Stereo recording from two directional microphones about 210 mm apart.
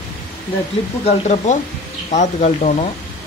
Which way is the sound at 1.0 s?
35° left (ahead or behind).